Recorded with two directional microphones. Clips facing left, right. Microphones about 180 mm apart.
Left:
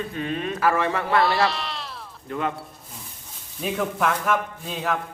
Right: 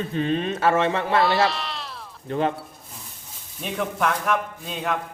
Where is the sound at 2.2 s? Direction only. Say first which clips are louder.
Right 4 dB; 30° right (ahead or behind).